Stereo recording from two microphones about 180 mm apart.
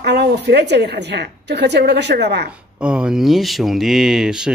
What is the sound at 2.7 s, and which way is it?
Speech, 5° right (ahead or behind).